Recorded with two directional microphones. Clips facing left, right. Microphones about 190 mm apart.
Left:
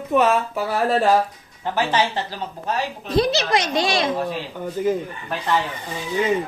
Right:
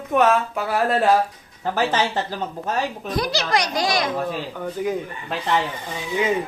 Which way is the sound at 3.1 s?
25° left (ahead or behind).